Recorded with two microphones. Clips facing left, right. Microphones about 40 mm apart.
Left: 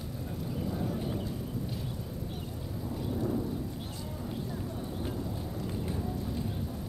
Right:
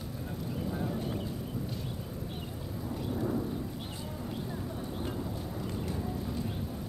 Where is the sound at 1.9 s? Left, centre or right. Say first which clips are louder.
Even; centre.